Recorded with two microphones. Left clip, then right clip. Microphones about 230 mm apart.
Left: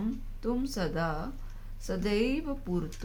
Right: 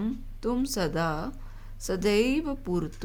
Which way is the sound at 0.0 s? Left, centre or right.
Right.